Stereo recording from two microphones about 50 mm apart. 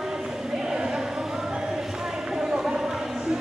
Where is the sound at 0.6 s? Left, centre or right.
Centre.